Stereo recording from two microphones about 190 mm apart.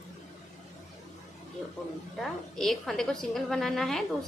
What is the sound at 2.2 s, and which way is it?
A woman's voice, centre (ahead or behind).